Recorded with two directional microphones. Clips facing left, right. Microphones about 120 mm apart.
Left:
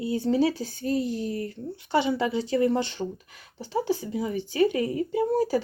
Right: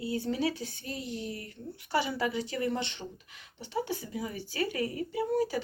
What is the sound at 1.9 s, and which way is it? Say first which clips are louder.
Speech: left 6 dB; 25° left (ahead or behind).